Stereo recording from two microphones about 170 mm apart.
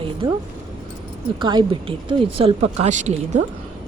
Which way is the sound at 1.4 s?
25° right (ahead or behind).